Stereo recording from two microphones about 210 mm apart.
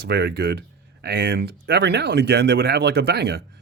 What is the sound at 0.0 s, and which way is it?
Speech, 50° right (ahead or behind).